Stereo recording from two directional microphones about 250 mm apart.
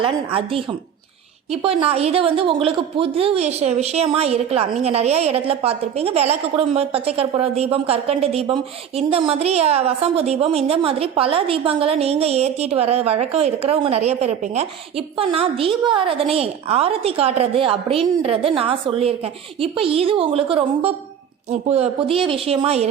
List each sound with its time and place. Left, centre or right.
0.0 s a woman's voice: right